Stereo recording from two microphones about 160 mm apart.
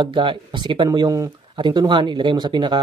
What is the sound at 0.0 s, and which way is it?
Speech, 30° right (ahead or behind).